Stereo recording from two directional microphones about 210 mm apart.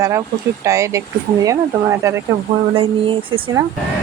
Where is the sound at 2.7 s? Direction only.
25° right (ahead or behind).